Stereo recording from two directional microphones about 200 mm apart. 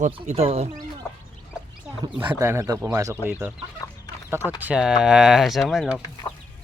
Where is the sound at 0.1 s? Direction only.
30° right (ahead or behind).